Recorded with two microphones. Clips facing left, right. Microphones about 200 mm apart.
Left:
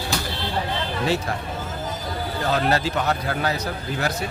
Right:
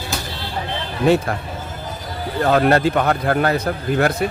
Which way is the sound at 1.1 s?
55° right (ahead or behind).